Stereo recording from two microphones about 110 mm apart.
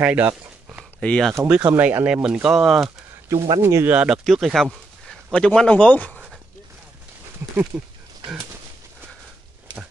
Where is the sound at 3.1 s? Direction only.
25° right (ahead or behind).